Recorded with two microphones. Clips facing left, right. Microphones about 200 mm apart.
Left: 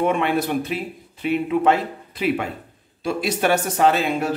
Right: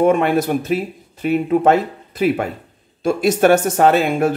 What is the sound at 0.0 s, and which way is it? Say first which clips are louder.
Speech: right 6 dB; 45° right (ahead or behind).